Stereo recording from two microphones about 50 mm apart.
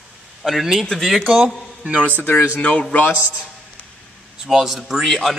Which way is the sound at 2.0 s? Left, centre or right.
Left.